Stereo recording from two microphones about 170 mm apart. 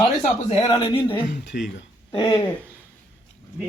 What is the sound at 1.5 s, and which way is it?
Speech, 55° left (ahead or behind).